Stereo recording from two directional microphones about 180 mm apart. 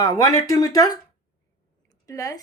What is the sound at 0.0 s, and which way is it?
Speech, 20° left (ahead or behind).